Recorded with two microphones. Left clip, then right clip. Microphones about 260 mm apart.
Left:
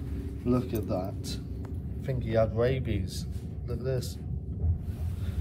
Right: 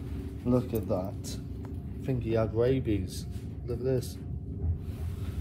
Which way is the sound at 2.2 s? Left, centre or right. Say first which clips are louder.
Left 1 dB; centre.